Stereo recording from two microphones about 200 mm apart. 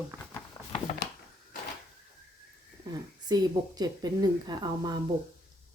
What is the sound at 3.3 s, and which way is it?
Speech, 20° right (ahead or behind).